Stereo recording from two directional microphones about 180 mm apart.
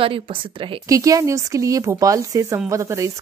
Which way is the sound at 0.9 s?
20° right (ahead or behind).